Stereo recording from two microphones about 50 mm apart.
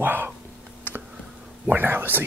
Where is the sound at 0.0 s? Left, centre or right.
Right.